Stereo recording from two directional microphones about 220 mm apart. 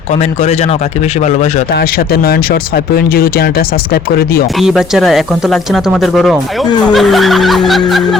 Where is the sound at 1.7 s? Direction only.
45° left (ahead or behind).